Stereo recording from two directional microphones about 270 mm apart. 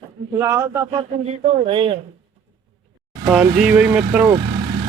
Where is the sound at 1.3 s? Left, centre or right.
Right.